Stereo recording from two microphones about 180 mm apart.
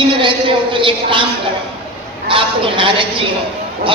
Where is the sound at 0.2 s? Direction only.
25° right (ahead or behind).